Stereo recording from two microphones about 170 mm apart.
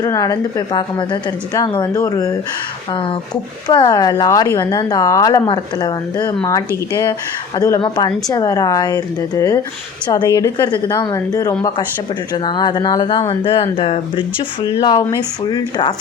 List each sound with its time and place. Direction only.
0.0 s speech: 20° left (ahead or behind)
2.9 s speech: 30° left (ahead or behind)